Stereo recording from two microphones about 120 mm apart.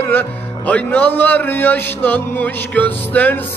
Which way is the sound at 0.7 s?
15° left (ahead or behind).